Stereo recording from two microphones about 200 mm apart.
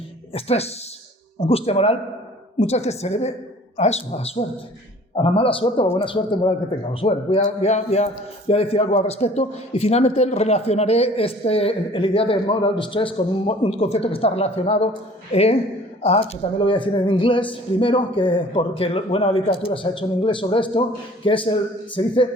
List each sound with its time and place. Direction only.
0.3 s a man's voice: 30° left (ahead or behind)